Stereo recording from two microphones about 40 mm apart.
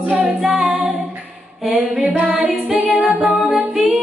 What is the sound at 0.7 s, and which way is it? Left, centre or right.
Music, right.